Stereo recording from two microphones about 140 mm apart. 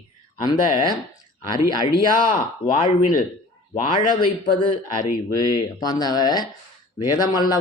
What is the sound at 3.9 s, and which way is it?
Speech, 35° left (ahead or behind).